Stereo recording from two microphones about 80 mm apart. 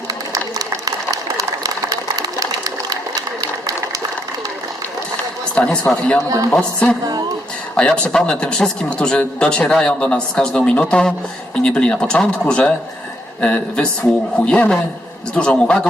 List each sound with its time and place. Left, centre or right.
0.3 s a sound: right
5.5 s speech: centre
6.2 s speech: right
6.5 s speech: centre
7.0 s music: right
7.8 s speech: centre